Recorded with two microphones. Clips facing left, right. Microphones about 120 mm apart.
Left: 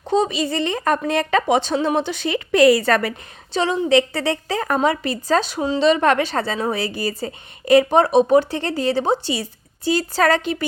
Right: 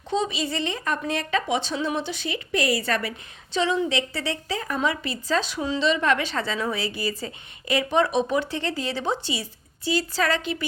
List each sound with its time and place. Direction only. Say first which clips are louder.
0.1 s speech: left 6 dB; 50° left (ahead or behind)
3.5 s speech: left 6 dB; 45° left (ahead or behind); by 4.9 s 60° left (ahead or behind)
4.9 s speech: left 7 dB; 50° left (ahead or behind)
5.8 s speech: left 7 dB; 55° left (ahead or behind)